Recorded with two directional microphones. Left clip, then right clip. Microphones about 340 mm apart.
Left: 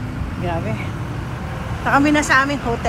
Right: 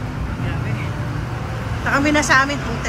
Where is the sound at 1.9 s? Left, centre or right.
Centre.